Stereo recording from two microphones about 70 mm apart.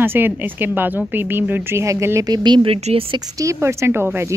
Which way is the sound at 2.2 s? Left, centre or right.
Right.